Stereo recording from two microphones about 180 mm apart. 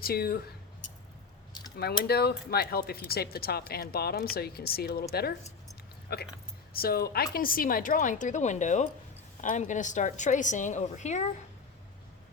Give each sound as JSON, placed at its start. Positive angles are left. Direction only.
{"t": 0.0, "sound": "speech", "side_deg": 55}
{"t": 2.0, "sound": "speech", "side_deg": 60}
{"t": 6.1, "sound": "a woman's voice", "side_deg": 65}